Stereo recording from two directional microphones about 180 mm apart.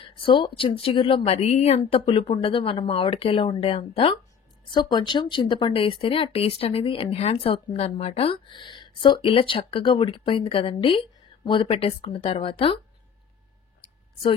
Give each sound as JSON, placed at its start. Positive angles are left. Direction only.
{"t": 0.0, "sound": "speech", "side_deg": 30}